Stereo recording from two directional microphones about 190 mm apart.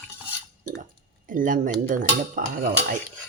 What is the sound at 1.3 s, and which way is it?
Speech, 45° right (ahead or behind).